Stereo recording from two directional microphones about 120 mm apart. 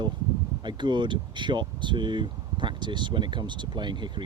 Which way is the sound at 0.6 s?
40° right (ahead or behind).